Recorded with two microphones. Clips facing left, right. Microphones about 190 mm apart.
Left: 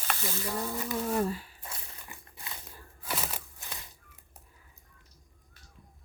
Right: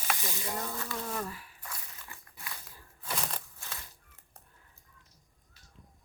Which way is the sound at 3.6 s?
15° left (ahead or behind).